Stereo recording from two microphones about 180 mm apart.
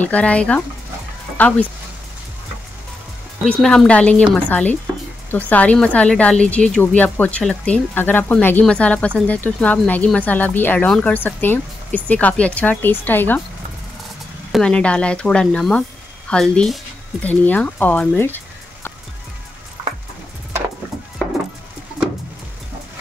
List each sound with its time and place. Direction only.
0.0 s speech: 5° left (ahead or behind)
3.6 s speech: 5° left (ahead or behind)
14.5 s speech: 5° left (ahead or behind)